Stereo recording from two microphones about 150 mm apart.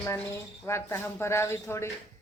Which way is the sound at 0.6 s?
15° left (ahead or behind).